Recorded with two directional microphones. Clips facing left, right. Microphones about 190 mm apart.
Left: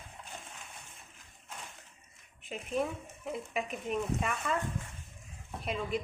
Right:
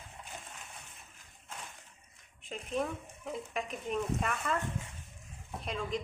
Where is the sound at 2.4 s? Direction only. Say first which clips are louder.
Left 1 dB; 5° left (ahead or behind).